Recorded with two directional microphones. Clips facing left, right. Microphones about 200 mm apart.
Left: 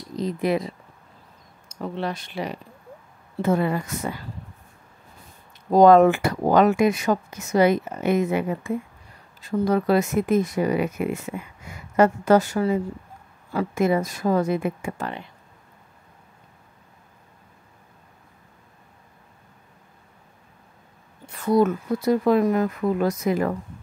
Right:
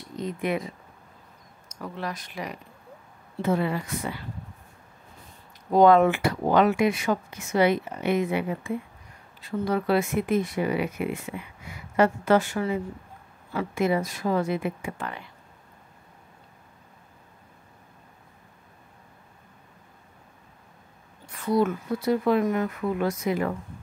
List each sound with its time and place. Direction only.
0.1 s speech: 35° left (ahead or behind)
3.4 s speech: 50° left (ahead or behind)
5.7 s speech: 40° left (ahead or behind)
21.5 s speech: 45° left (ahead or behind)